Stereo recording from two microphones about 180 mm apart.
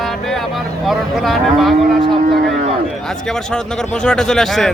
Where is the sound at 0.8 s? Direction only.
Centre (ahead or behind).